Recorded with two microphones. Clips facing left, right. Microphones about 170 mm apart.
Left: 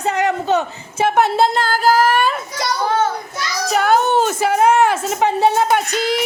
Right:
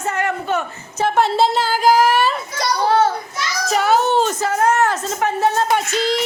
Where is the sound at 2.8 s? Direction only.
35° right (ahead or behind).